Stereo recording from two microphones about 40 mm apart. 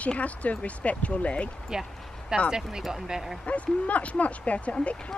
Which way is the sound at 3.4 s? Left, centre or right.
Left.